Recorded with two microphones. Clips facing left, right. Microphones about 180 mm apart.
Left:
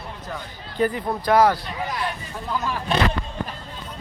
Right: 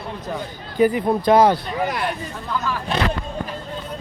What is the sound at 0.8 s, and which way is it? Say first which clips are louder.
Speech: right 6 dB; 15° right (ahead or behind).